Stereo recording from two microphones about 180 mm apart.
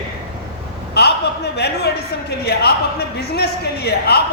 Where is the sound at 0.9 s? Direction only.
65° left (ahead or behind).